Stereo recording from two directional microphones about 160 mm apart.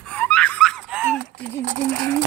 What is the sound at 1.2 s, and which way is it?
Speech, 55° right (ahead or behind).